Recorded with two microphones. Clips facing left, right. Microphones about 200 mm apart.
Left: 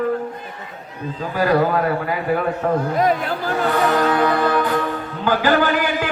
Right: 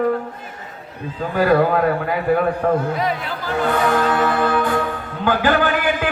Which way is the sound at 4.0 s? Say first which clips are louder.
Left 1 dB; 45° left (ahead or behind).